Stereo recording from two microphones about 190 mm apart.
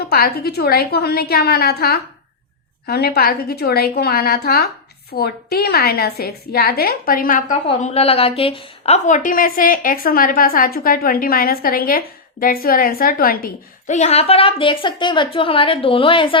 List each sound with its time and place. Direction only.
0.0 s a woman's voice: 55° left (ahead or behind)
7.7 s a woman's voice: 30° left (ahead or behind)